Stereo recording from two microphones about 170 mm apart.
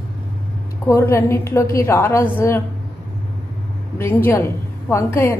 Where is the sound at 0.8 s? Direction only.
15° left (ahead or behind).